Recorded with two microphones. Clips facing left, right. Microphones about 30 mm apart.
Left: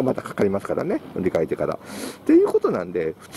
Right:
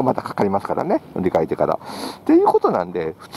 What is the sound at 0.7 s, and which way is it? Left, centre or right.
Speech, centre.